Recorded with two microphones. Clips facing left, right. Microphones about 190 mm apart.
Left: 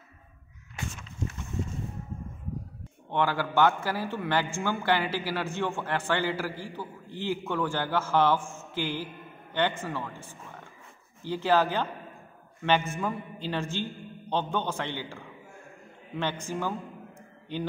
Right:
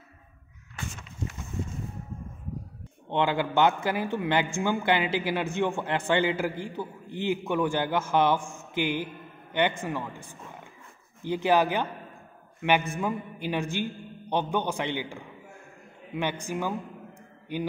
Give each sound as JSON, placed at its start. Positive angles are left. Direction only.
{"t": 3.1, "sound": "a man's voice", "side_deg": -20}
{"t": 16.2, "sound": "a man's voice", "side_deg": -15}